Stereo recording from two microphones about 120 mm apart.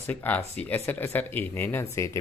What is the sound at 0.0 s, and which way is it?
Speech, 15° left (ahead or behind).